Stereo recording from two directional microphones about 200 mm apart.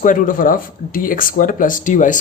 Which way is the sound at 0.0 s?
40° left (ahead or behind).